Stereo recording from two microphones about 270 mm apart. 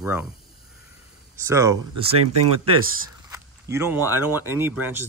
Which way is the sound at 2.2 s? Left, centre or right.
Right.